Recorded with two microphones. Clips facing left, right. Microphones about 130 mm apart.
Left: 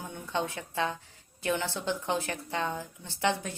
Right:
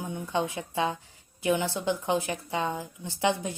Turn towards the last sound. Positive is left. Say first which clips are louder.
# right 3 dB
turn(degrees=-15)  # may be behind; listen again after turning